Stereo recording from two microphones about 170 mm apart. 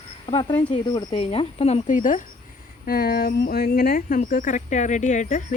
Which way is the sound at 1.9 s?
50° left (ahead or behind).